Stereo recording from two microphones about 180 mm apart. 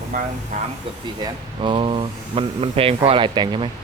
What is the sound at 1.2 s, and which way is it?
Speech, 25° right (ahead or behind).